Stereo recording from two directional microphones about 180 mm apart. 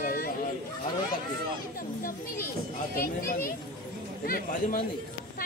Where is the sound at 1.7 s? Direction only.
50° left (ahead or behind).